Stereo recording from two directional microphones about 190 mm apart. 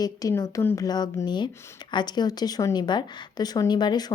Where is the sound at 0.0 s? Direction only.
20° left (ahead or behind).